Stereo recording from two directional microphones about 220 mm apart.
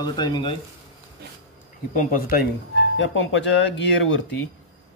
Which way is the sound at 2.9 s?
55° left (ahead or behind).